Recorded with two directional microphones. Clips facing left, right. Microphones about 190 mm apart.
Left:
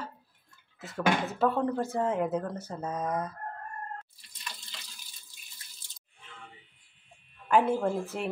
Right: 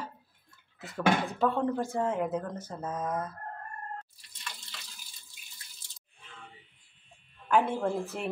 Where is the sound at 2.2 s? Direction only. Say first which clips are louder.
Left 2 dB; 10° left (ahead or behind).